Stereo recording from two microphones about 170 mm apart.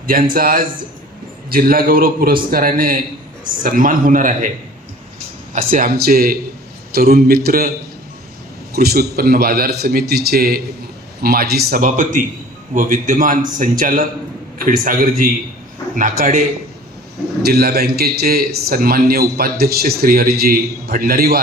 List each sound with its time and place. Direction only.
0.1 s a man's voice: 55° right (ahead or behind)
5.7 s a man's voice: 60° right (ahead or behind)
8.7 s a man's voice: 65° right (ahead or behind); by 16.4 s 50° right (ahead or behind)
17.4 s a man's voice: 65° right (ahead or behind)